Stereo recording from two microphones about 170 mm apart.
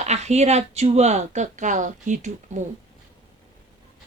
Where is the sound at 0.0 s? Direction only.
40° right (ahead or behind).